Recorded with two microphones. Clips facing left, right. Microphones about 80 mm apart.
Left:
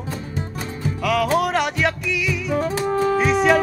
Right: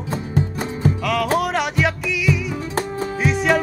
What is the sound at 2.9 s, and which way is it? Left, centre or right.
Music, left.